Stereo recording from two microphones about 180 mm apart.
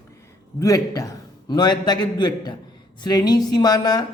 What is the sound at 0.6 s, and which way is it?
A man's voice, 20° left (ahead or behind).